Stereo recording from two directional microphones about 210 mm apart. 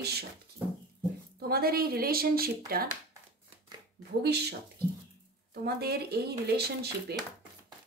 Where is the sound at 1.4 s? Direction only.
45° right (ahead or behind).